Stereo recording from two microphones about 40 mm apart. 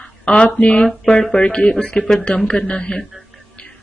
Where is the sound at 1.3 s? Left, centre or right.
Left.